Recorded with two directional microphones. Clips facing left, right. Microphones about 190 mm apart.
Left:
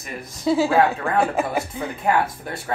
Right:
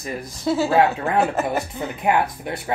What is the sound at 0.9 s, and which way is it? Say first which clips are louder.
Speech: right 1 dB; 5° right (ahead or behind).